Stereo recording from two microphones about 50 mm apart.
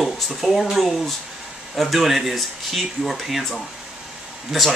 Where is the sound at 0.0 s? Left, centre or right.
Centre.